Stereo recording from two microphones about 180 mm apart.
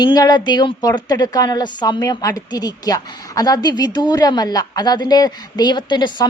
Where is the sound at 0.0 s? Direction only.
25° left (ahead or behind).